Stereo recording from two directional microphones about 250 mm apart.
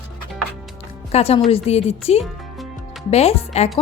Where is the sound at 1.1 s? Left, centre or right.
Left.